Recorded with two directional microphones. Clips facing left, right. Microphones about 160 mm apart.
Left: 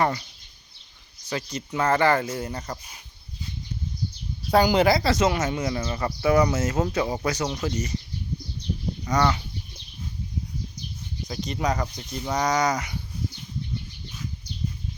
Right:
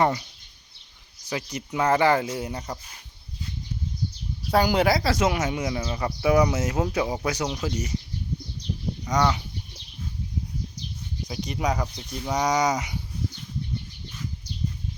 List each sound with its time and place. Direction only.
0.0 s speech: 15° right (ahead or behind)
1.3 s speech: 15° right (ahead or behind)
4.5 s speech: centre (ahead or behind)
6.2 s speech: 15° right (ahead or behind)
9.1 s speech: 15° right (ahead or behind)
11.3 s speech: 10° right (ahead or behind)